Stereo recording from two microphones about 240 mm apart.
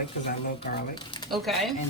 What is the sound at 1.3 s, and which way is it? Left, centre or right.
Speech, centre.